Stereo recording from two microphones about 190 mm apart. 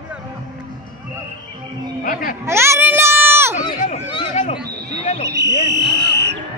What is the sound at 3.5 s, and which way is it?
Run, 40° left (ahead or behind).